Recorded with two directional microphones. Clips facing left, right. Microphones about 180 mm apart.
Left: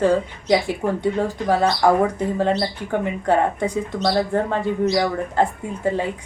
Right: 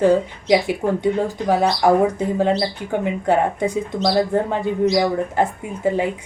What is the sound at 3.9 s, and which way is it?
Speech, 5° right (ahead or behind).